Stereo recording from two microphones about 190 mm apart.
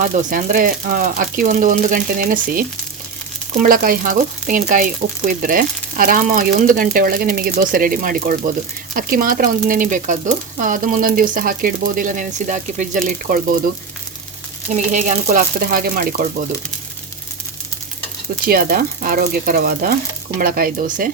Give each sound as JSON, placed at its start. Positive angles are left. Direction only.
{"t": 0.0, "sound": "frying", "side_deg": -45}
{"t": 14.7, "sound": "frying", "side_deg": -40}
{"t": 18.4, "sound": "frying", "side_deg": -50}